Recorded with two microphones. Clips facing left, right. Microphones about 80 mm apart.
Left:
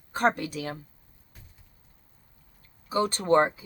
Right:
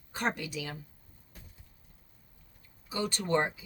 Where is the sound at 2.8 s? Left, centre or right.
Left.